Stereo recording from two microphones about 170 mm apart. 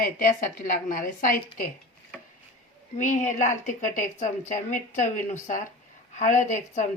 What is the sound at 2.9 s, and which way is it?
Speech, 50° left (ahead or behind).